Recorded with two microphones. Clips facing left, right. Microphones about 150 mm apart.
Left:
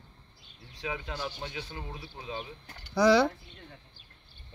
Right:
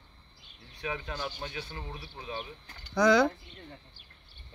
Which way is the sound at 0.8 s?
15° left (ahead or behind).